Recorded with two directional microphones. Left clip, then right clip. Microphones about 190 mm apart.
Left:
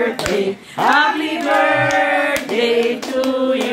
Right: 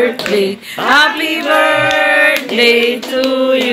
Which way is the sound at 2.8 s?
55° left (ahead or behind).